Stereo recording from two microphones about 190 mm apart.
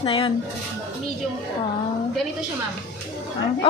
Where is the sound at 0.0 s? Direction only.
30° left (ahead or behind).